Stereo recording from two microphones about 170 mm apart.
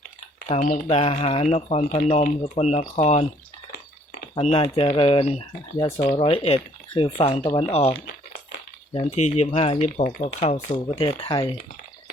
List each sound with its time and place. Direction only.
0.9 s speech: 35° left (ahead or behind)
3.7 s drip: 70° left (ahead or behind)
4.4 s speech: 35° left (ahead or behind)
6.0 s speech: 40° left (ahead or behind)
10.0 s speech: 50° left (ahead or behind)
10.4 s speech: 40° left (ahead or behind)
11.0 s speech: 25° left (ahead or behind)